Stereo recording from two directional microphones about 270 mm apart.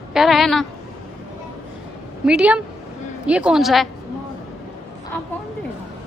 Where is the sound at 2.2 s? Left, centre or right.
Centre.